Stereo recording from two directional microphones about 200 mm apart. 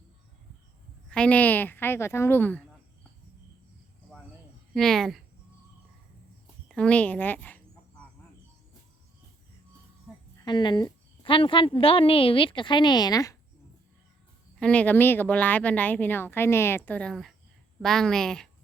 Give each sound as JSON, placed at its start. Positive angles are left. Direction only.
{"t": 1.1, "sound": "a woman's voice", "side_deg": 5}
{"t": 4.7, "sound": "a woman's voice", "side_deg": 0}
{"t": 6.7, "sound": "a sound", "side_deg": 5}
{"t": 10.4, "sound": "a woman's voice", "side_deg": 20}
{"t": 14.6, "sound": "a woman's voice", "side_deg": 5}